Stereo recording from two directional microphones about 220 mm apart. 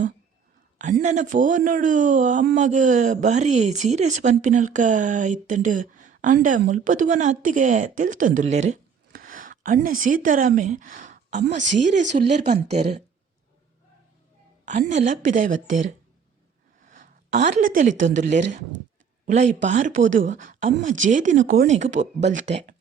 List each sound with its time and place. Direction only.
1.0 s speech: 35° right (ahead or behind)
14.6 s speech: 35° right (ahead or behind)
16.8 s speech: 35° right (ahead or behind)